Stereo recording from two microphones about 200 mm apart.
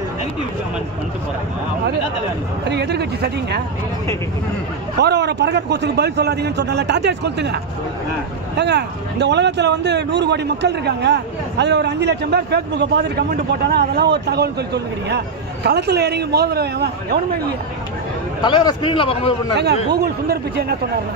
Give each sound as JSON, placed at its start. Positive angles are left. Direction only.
{"t": 2.7, "sound": "a man's voice", "side_deg": -55}
{"t": 5.0, "sound": "a man's voice", "side_deg": -55}
{"t": 18.4, "sound": "a man's voice", "side_deg": 20}
{"t": 19.9, "sound": "speech", "side_deg": -50}